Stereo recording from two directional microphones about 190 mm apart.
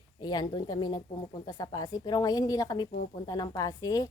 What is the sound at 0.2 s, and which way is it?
A woman's voice, 20° left (ahead or behind).